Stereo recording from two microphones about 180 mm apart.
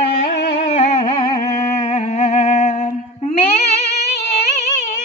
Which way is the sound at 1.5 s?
15° left (ahead or behind).